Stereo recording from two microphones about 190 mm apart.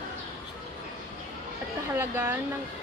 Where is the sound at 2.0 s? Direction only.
15° right (ahead or behind).